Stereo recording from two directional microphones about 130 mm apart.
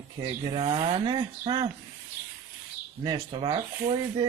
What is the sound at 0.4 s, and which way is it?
A man's voice, 50° right (ahead or behind).